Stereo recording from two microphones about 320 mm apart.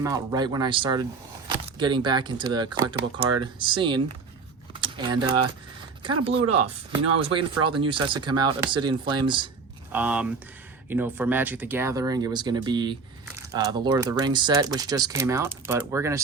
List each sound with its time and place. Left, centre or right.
0.0 s speech: centre
6.3 s speech: right
7.8 s speech: centre